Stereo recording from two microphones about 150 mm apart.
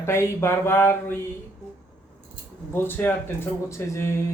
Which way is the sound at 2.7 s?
15° left (ahead or behind).